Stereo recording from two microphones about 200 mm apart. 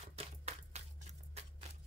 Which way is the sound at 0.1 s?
30° right (ahead or behind).